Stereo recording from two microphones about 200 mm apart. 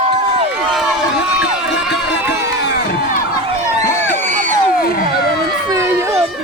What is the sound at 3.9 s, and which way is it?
Crowd, 35° right (ahead or behind).